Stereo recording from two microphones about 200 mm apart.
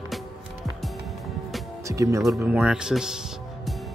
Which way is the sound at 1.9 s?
15° right (ahead or behind).